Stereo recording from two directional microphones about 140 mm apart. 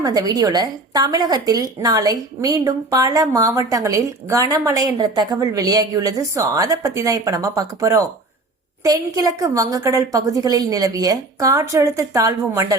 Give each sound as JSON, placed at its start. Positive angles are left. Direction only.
{"t": 0.0, "sound": "a woman's voice", "side_deg": -30}